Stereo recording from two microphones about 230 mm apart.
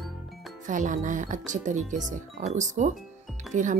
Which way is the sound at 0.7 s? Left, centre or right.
Right.